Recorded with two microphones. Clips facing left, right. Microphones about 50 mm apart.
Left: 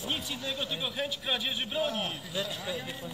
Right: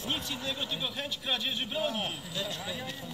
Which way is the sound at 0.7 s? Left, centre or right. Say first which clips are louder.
Left 2 dB; centre.